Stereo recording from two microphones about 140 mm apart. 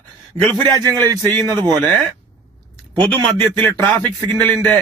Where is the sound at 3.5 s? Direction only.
15° left (ahead or behind).